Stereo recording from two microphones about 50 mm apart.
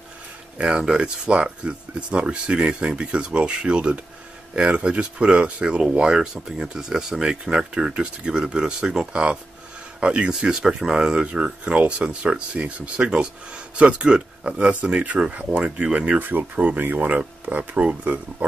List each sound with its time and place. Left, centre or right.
0.6 s speech: right
16.2 s speech: right
16.5 s speech: right